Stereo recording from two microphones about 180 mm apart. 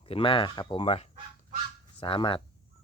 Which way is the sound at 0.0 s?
30° left (ahead or behind).